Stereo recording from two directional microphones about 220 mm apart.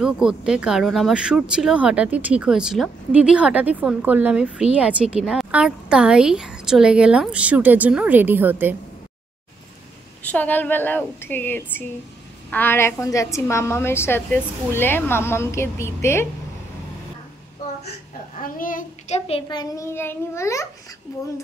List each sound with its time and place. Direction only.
0.0 s speech: 5° right (ahead or behind)
10.2 s a woman's voice: 5° left (ahead or behind)
18.4 s a child's voice: 40° left (ahead or behind); by 20.6 s 15° left (ahead or behind)